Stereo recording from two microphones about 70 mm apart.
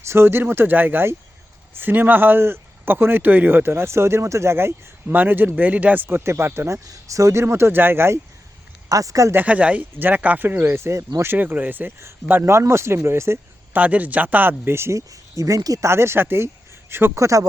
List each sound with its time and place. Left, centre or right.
0.1 s speech: right
5.0 s speech: right
6.1 s speech: right
6.8 s speech: right
8.9 s speech: right
9.3 s speech: right
11.9 s speech: right
13.7 s speech: right
15.9 s speech: right
17.2 s speech: right